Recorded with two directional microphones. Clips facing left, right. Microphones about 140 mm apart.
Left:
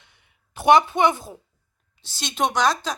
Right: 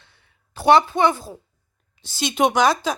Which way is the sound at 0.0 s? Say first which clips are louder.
Right 2 dB; 20° left (ahead or behind).